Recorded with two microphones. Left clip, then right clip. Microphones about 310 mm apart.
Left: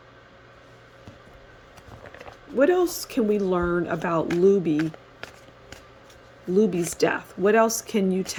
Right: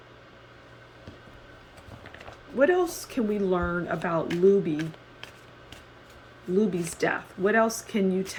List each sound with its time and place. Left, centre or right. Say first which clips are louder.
2.6 s speech: left 2 dB; left
6.6 s speech: left 5 dB; left